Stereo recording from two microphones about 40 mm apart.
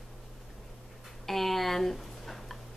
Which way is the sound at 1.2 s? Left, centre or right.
Centre.